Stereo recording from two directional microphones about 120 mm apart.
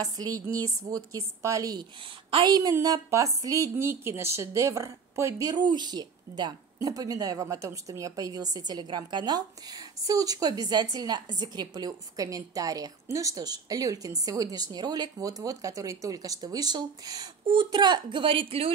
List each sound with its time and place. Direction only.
0.0 s a woman's voice: 30° right (ahead or behind); by 18.7 s 50° right (ahead or behind)